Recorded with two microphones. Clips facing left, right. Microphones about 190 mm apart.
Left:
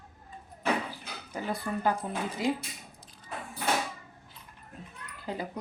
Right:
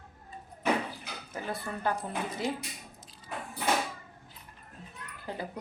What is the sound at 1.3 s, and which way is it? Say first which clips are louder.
Speech: left 4 dB; 15° left (ahead or behind).